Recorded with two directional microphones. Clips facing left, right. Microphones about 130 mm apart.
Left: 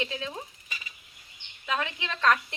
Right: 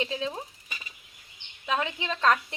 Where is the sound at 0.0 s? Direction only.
25° right (ahead or behind).